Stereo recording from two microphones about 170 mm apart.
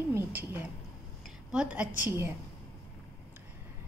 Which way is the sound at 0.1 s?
10° right (ahead or behind).